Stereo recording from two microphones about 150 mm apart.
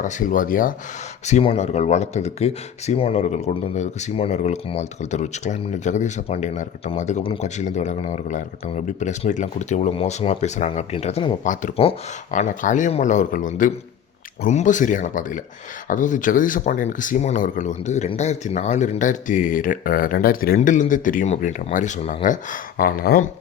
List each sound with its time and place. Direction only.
0.0 s speech: 60° left (ahead or behind)
1.2 s speech: 50° left (ahead or behind)
11.4 s speech: 60° left (ahead or behind); by 20.6 s 75° left (ahead or behind)
20.6 s speech: 55° left (ahead or behind); by 23.3 s 85° left